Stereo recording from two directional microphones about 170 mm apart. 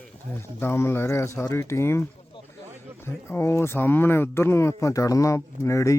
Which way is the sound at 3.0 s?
15° left (ahead or behind).